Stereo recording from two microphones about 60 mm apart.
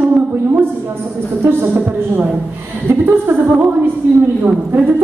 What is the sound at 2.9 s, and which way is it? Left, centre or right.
A woman's voice, right.